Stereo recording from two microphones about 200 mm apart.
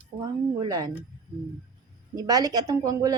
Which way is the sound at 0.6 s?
20° right (ahead or behind).